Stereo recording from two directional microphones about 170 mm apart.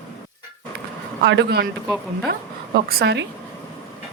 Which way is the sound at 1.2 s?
90° right.